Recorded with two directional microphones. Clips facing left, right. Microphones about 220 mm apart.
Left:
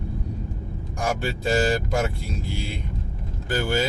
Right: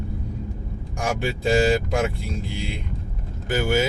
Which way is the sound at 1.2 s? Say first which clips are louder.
Right 4 dB; 15° right (ahead or behind).